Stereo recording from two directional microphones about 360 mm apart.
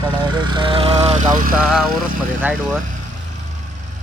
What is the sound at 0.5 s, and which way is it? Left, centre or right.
Speech, centre.